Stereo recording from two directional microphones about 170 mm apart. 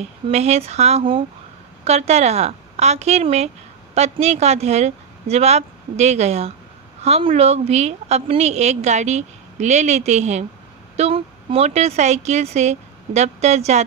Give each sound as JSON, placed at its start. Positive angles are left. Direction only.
{"t": 0.3, "sound": "a woman's voice", "side_deg": -40}